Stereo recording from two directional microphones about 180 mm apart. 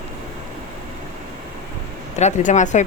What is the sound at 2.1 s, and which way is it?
Speech, 40° left (ahead or behind).